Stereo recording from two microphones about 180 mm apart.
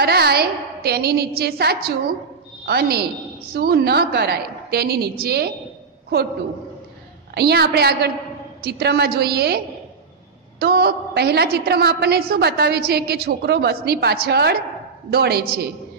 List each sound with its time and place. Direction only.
0.0 s a woman's voice: 60° right (ahead or behind)
7.3 s a woman's voice: 65° right (ahead or behind)
10.6 s a woman's voice: 60° right (ahead or behind)